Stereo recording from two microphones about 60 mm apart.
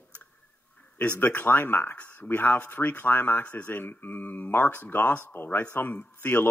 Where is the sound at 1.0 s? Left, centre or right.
Left.